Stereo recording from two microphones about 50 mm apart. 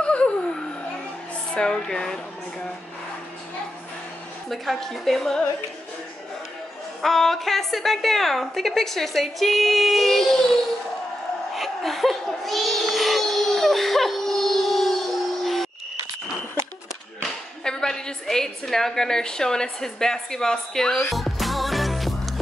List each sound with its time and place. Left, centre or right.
0.0 s a sound: left
1.5 s a woman's voice: centre
4.5 s a woman's voice: centre
7.0 s a woman's voice: centre
11.5 s a sound: centre
17.6 s a woman's voice: centre
21.1 s music: centre